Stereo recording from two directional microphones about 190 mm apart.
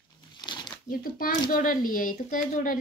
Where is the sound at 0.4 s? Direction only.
25° left (ahead or behind).